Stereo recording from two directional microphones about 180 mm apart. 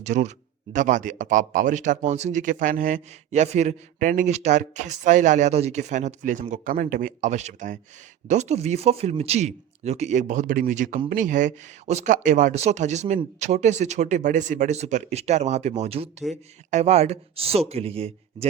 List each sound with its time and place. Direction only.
0.0 s speech: 40° right (ahead or behind)